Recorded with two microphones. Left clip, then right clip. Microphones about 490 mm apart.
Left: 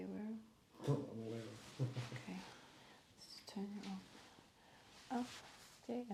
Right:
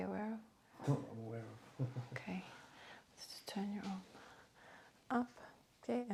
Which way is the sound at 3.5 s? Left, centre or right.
Right.